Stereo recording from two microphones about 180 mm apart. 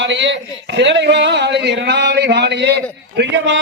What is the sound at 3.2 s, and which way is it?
Speech, 80° right.